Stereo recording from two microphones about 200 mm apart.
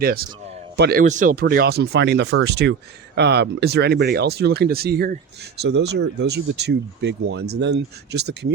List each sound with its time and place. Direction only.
0.0 s speech: 50° right (ahead or behind)
1.0 s speech: 40° right (ahead or behind); by 8.5 s 60° right (ahead or behind)